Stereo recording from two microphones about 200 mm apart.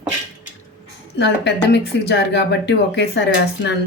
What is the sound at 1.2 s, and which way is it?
Speech, 60° left (ahead or behind).